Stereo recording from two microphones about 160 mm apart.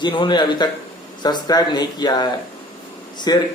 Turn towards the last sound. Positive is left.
turn(degrees=25)  # may be behind; listen again after turning